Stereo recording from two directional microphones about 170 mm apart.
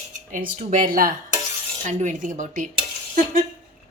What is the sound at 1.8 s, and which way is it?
Dishes, 45° right (ahead or behind).